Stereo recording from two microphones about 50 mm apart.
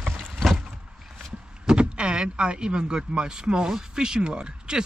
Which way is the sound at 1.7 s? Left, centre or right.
Centre.